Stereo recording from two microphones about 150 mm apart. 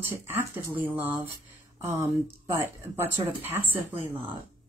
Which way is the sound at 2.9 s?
15° right (ahead or behind).